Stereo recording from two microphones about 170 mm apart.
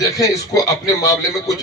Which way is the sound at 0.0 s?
20° left (ahead or behind).